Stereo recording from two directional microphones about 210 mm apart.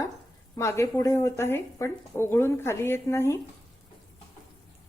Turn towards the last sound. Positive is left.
turn(degrees=10)  # may be behind; listen again after turning